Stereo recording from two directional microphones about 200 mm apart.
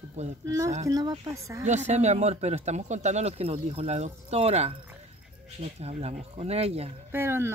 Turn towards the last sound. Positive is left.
turn(degrees=-10)  # may be behind; listen again after turning